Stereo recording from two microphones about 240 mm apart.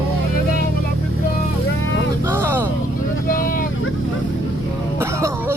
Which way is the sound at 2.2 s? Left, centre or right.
Centre.